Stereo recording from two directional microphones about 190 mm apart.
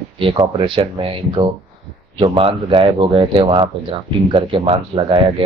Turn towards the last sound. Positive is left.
turn(degrees=-25)  # may be behind; listen again after turning